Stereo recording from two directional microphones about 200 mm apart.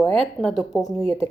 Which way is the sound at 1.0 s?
30° right (ahead or behind).